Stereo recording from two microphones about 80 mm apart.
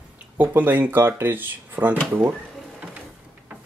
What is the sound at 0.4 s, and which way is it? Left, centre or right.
Speech, right.